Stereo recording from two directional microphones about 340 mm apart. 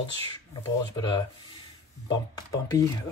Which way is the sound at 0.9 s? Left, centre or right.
Centre.